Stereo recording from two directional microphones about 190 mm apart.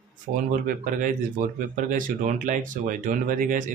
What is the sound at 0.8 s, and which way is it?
Speech, 45° right (ahead or behind).